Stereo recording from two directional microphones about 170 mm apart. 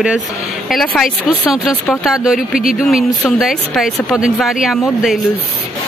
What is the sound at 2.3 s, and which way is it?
Speech, 55° left (ahead or behind).